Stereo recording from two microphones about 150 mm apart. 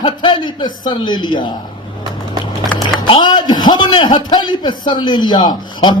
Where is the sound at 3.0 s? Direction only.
30° left (ahead or behind).